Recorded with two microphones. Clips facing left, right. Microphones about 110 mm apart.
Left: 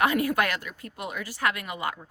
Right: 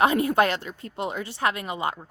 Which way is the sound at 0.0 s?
25° right (ahead or behind).